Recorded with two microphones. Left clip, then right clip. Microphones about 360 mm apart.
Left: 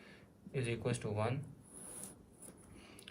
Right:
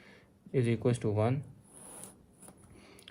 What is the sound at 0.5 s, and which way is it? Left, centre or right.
Speech, right.